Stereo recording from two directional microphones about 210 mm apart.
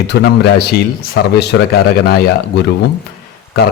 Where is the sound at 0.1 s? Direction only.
50° left (ahead or behind).